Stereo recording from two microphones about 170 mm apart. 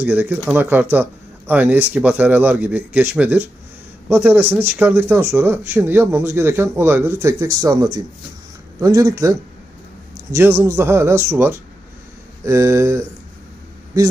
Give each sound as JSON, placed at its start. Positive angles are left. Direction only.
{"t": 0.0, "sound": "speech", "side_deg": -10}